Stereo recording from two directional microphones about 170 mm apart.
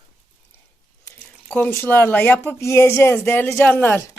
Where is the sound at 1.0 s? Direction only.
10° left (ahead or behind).